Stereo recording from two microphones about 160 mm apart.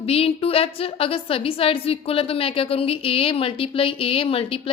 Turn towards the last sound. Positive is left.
turn(degrees=35)  # may be behind; listen again after turning